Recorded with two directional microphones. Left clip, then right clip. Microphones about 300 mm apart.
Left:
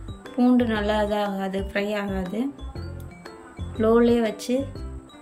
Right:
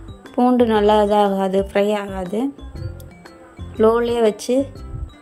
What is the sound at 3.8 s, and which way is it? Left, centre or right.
Speech, centre.